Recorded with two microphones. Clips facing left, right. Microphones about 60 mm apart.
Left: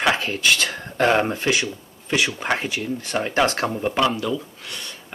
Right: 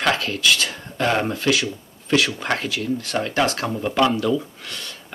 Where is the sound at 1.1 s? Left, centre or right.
Left.